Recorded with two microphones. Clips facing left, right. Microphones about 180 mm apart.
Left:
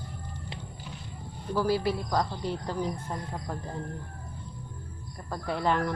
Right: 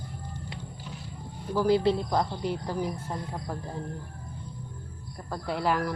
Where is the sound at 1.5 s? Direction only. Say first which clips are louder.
Right 4 dB; 20° right (ahead or behind).